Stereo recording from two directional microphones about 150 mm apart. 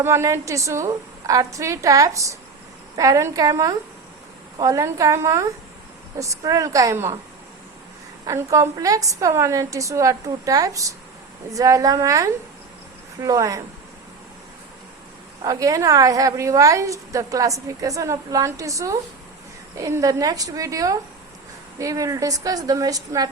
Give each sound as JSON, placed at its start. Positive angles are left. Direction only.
{"t": 0.0, "sound": "a woman's voice", "side_deg": -20}
{"t": 8.2, "sound": "a woman's voice", "side_deg": -20}
{"t": 15.4, "sound": "a woman's voice", "side_deg": -20}